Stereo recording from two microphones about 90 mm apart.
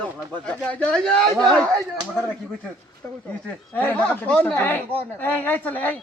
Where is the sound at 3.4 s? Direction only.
20° left (ahead or behind).